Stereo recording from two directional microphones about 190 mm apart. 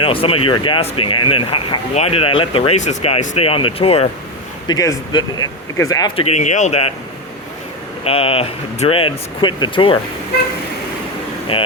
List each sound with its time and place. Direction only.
0.0 s speech: 30° left (ahead or behind)
4.7 s speech: 20° left (ahead or behind)
6.1 s speech: 35° left (ahead or behind)
8.0 s speech: 30° left (ahead or behind)
11.5 s speech: 30° left (ahead or behind)